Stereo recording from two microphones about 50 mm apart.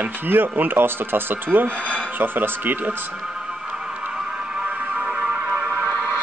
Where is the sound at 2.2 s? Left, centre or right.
Right.